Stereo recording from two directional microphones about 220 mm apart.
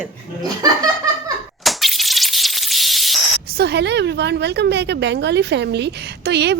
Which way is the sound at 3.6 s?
50° right (ahead or behind).